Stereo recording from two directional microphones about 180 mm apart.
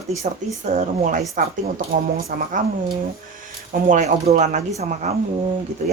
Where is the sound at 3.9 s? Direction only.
40° right (ahead or behind).